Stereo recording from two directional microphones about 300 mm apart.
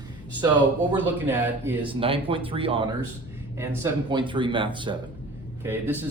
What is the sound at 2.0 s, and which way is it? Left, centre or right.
A man's voice, centre.